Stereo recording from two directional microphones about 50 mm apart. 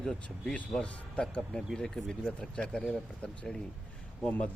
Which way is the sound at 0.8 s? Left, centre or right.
Left.